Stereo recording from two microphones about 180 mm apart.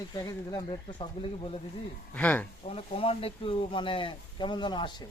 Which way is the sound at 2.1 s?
10° left (ahead or behind).